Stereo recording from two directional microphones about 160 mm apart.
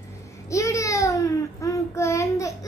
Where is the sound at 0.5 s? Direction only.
20° left (ahead or behind).